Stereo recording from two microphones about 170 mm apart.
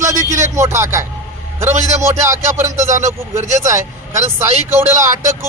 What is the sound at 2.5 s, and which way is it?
A man's voice, 15° right (ahead or behind).